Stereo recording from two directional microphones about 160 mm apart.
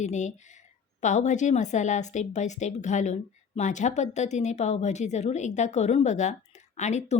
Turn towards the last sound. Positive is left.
turn(degrees=45)  # may be behind; listen again after turning